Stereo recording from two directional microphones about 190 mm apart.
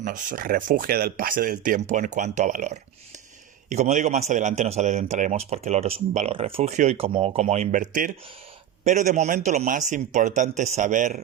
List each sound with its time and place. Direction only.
0.0 s speech: 45° right (ahead or behind)